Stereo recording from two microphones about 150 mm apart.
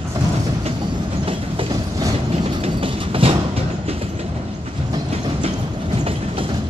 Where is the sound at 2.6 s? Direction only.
40° right (ahead or behind).